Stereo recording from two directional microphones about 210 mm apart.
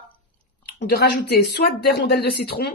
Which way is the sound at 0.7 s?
50° left (ahead or behind).